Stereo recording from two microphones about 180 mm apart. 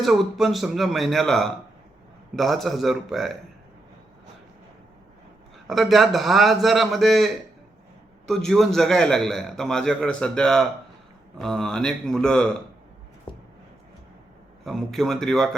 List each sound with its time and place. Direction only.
0.0 s a man's voice: centre (ahead or behind)
5.6 s a man's voice: centre (ahead or behind)
8.3 s a man's voice: centre (ahead or behind)
13.3 s a sound: 30° left (ahead or behind)
14.6 s a man's voice: centre (ahead or behind)